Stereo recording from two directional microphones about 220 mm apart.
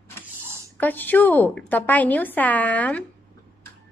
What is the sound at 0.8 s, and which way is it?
A woman's voice, 10° left (ahead or behind).